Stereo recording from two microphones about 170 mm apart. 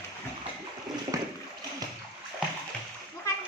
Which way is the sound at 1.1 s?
20° right (ahead or behind).